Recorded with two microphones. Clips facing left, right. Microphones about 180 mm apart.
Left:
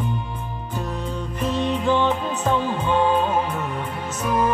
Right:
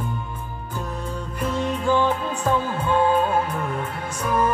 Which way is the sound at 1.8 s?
10° right (ahead or behind).